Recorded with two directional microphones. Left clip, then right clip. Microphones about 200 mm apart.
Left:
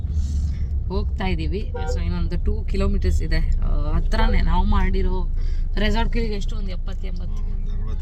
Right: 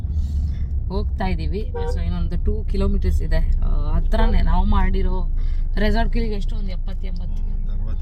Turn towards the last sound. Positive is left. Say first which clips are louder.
# even
turn(degrees=5)  # may be behind; listen again after turning